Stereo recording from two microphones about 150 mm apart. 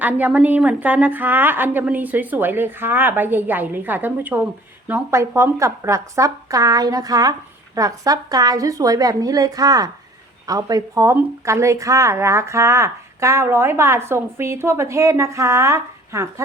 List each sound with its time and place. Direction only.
0.0 s a woman's voice: 10° right (ahead or behind)